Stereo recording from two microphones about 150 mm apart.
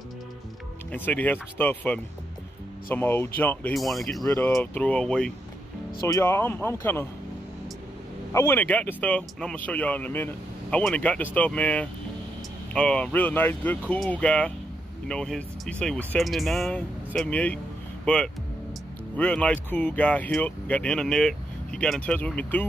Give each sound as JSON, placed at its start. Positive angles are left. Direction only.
{"t": 0.9, "sound": "speech", "side_deg": 10}
{"t": 3.7, "sound": "speech", "side_deg": 0}
{"t": 4.3, "sound": "speech", "side_deg": 20}
{"t": 5.9, "sound": "speech", "side_deg": 20}
{"t": 8.3, "sound": "speech", "side_deg": 15}